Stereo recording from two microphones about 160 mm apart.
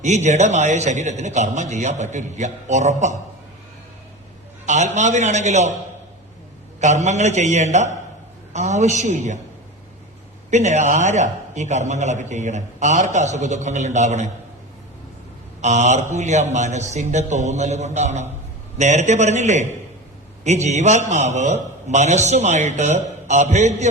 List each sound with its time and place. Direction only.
0.0 s a man's voice: 45° right (ahead or behind)
4.6 s a man's voice: 50° right (ahead or behind)
6.7 s a man's voice: 45° right (ahead or behind)
10.5 s a man's voice: 45° right (ahead or behind)
15.6 s a man's voice: 45° right (ahead or behind)